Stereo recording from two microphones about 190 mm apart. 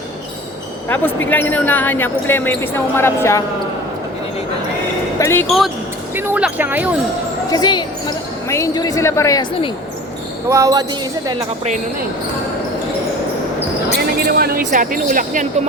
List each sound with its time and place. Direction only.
0.9 s speech: 10° left (ahead or behind)
5.2 s speech: 10° left (ahead or behind)
5.5 s speech: centre (ahead or behind)
7.5 s speech: 20° left (ahead or behind)
10.5 s speech: 20° right (ahead or behind)
14.3 s speech: 50° right (ahead or behind)